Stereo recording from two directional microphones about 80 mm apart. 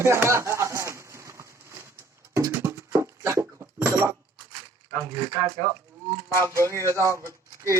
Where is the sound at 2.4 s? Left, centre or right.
Right.